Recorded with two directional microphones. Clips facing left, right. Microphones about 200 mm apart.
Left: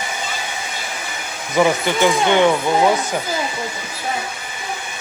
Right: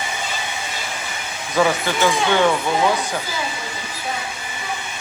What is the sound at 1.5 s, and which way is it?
Speech, 15° left (ahead or behind).